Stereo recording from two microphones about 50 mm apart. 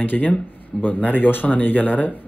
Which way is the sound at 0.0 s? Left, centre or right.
Left.